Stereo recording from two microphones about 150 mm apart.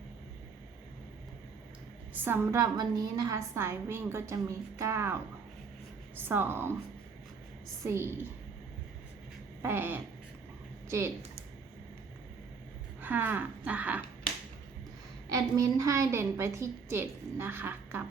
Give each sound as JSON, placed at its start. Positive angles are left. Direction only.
{"t": 2.2, "sound": "a woman's voice", "side_deg": -15}
{"t": 7.9, "sound": "a woman's voice", "side_deg": -15}
{"t": 9.6, "sound": "a sound", "side_deg": -15}
{"t": 10.8, "sound": "speech", "side_deg": -15}
{"t": 13.0, "sound": "a woman's voice", "side_deg": -10}
{"t": 15.3, "sound": "a woman's voice", "side_deg": -20}